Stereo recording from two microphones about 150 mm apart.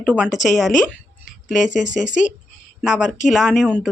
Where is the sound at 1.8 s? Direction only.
55° left (ahead or behind).